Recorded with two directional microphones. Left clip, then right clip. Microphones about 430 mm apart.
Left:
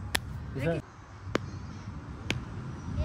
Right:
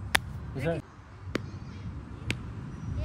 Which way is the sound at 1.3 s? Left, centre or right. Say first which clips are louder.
Left 3 dB; centre.